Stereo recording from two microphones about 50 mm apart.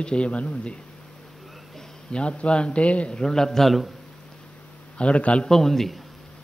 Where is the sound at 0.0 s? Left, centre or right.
Left.